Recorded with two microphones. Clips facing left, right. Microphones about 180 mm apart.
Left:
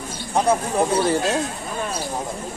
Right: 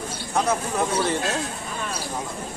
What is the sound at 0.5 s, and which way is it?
Speech, 30° left (ahead or behind).